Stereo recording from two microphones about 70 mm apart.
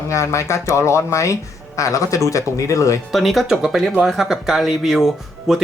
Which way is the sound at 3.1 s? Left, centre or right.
Centre.